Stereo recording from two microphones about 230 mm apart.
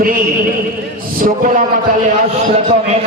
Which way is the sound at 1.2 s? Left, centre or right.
Right.